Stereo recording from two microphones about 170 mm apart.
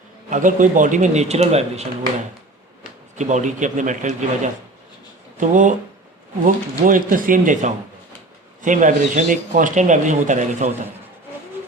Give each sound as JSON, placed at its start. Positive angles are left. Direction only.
{"t": 0.3, "sound": "speech", "side_deg": -50}
{"t": 5.4, "sound": "speech", "side_deg": -50}